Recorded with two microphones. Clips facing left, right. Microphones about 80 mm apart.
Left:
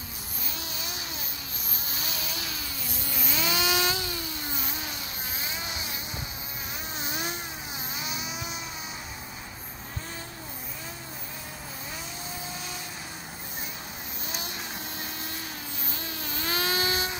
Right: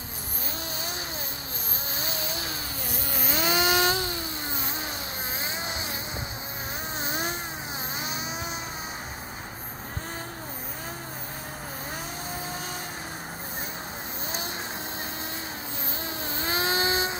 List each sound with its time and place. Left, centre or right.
2.0 s a sound: right
5.4 s vehicle: right
7.0 s vehicle: right
16.2 s vehicle: right